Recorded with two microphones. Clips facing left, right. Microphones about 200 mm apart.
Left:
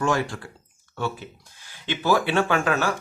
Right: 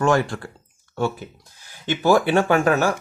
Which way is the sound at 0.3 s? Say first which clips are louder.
Right 5 dB; 55° right (ahead or behind).